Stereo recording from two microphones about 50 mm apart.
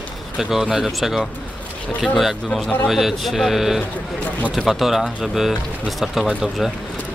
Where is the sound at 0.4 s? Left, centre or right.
Centre.